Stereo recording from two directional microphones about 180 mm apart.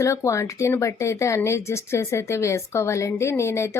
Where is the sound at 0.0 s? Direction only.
15° left (ahead or behind).